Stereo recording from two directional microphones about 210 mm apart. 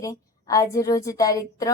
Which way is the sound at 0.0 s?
15° left (ahead or behind).